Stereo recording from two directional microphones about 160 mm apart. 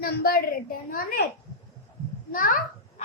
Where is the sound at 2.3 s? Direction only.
60° left (ahead or behind).